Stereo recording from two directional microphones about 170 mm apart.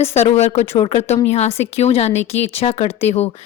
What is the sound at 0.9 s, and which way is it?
A woman's voice, 40° left (ahead or behind).